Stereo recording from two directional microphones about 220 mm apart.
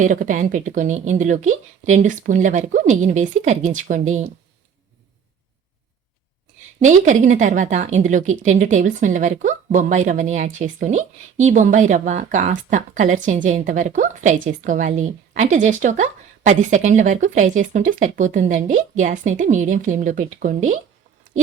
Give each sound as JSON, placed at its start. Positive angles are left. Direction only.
{"t": 0.0, "sound": "speech", "side_deg": -35}
{"t": 6.7, "sound": "speech", "side_deg": -35}